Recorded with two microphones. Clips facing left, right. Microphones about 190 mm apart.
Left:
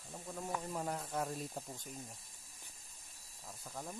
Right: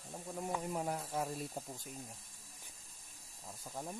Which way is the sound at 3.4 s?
10° right (ahead or behind).